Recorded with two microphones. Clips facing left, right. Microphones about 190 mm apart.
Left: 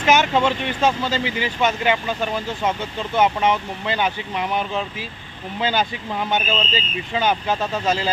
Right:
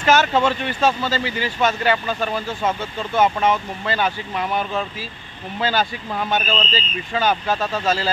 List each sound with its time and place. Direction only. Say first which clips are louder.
0.0 s speech: even; 15° left (ahead or behind)